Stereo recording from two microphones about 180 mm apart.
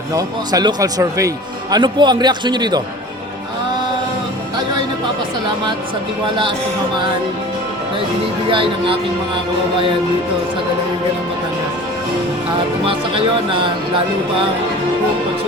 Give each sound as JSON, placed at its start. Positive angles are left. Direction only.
{"t": 0.1, "sound": "speech", "side_deg": -20}
{"t": 8.4, "sound": "speech", "side_deg": -30}
{"t": 12.8, "sound": "speech", "side_deg": -30}